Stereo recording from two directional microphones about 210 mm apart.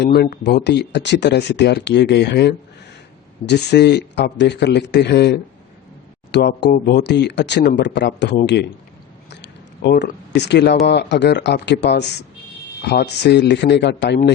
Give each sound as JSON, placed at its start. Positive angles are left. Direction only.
{"t": 0.0, "sound": "speech", "side_deg": 50}
{"t": 9.8, "sound": "speech", "side_deg": 55}